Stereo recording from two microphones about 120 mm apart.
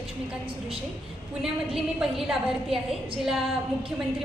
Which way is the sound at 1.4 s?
5° right (ahead or behind).